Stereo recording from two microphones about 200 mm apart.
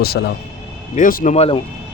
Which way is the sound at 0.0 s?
55° left (ahead or behind).